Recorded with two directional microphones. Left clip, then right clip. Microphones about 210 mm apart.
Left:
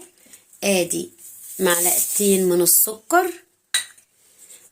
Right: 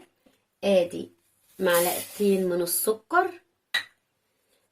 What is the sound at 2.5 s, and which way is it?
Speech, 40° left (ahead or behind).